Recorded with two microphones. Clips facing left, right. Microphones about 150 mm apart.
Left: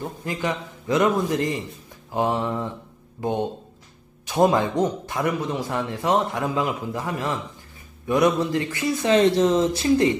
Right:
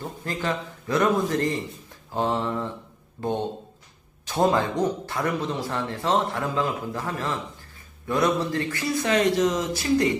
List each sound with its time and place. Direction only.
0.0 s speech: 15° left (ahead or behind)